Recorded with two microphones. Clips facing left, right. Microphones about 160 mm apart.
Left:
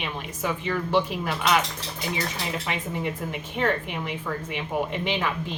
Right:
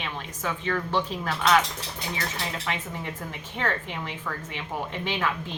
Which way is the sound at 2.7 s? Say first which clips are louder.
Left 4 dB; 20° left (ahead or behind).